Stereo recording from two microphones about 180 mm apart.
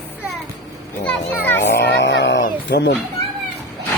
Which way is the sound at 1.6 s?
70° left (ahead or behind).